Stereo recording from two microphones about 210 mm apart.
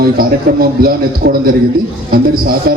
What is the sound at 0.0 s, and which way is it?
A man's voice, 45° right (ahead or behind).